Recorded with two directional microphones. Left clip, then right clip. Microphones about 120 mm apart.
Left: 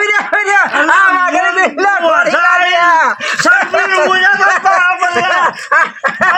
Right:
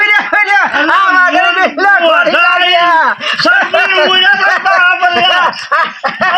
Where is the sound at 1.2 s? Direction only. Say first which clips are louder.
Right 2 dB; 25° left (ahead or behind).